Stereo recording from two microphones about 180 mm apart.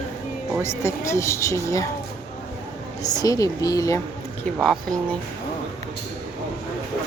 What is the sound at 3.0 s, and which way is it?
Speech, 20° left (ahead or behind).